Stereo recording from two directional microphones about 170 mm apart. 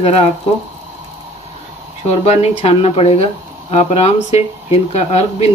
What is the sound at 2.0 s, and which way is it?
Speech, 40° left (ahead or behind).